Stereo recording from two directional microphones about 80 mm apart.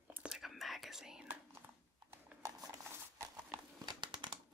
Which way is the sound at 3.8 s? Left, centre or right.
Right.